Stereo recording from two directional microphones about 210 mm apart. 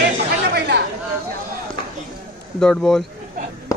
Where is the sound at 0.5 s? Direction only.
50° right (ahead or behind).